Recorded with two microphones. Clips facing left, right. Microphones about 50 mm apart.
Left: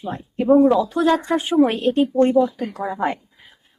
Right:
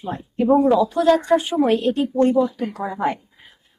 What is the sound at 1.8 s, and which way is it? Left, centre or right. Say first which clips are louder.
Speech: left 2 dB; left.